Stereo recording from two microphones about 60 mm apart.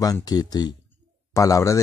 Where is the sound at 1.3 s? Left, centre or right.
Left.